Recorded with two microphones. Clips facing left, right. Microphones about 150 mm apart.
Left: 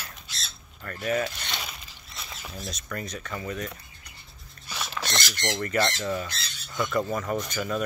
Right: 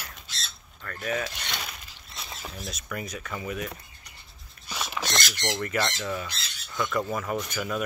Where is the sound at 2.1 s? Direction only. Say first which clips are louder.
Right 2 dB; 30° right (ahead or behind).